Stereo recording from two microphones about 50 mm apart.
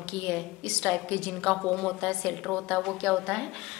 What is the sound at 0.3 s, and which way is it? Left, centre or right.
A woman's voice, left.